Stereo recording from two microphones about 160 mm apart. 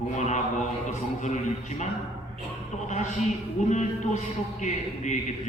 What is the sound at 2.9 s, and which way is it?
A man's voice, 50° left (ahead or behind).